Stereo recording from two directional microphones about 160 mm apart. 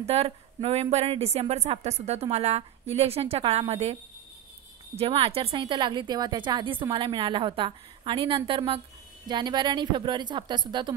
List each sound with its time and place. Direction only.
0.0 s a woman's voice: 40° right (ahead or behind)